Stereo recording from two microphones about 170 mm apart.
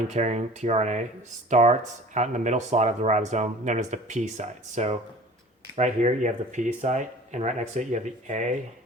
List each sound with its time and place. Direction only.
0.1 s speech: 40° right (ahead or behind)